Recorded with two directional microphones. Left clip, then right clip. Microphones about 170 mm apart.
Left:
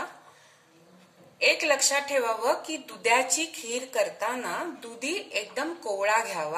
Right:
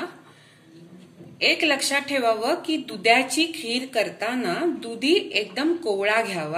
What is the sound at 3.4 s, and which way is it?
Speech, 40° left (ahead or behind).